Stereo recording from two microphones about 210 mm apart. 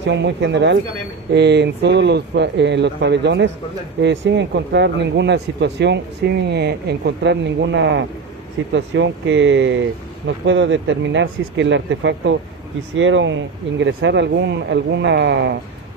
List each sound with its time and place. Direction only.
0.0 s speech: 55° right (ahead or behind)